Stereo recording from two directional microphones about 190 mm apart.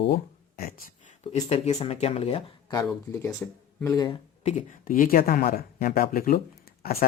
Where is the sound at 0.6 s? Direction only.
45° left (ahead or behind).